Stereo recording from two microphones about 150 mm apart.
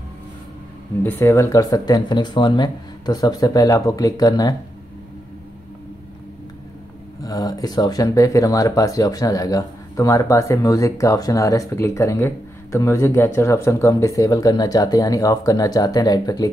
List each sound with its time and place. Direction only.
1.0 s speech: 20° left (ahead or behind)
7.2 s speech: 25° left (ahead or behind)